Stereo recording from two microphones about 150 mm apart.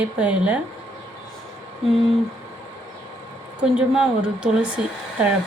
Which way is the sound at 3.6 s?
5° right (ahead or behind).